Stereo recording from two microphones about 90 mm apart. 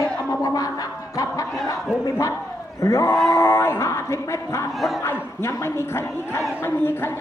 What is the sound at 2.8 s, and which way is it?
Speech, 35° left (ahead or behind).